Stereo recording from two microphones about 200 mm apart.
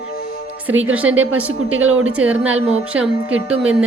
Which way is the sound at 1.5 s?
90° right.